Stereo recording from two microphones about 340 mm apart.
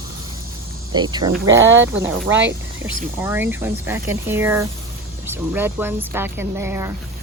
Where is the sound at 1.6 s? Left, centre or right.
Right.